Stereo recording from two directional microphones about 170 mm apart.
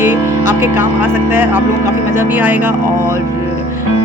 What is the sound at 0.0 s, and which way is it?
Music, 15° right (ahead or behind).